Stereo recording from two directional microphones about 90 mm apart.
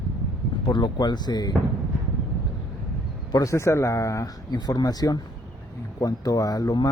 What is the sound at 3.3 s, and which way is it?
Speech, 35° left (ahead or behind).